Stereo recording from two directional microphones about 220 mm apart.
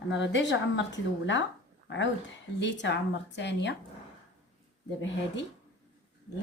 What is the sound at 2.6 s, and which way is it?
A woman's voice, 55° left (ahead or behind).